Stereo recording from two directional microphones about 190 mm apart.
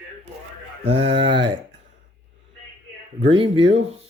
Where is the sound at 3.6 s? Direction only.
90° right.